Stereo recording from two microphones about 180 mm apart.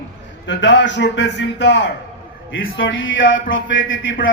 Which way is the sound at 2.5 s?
90° left.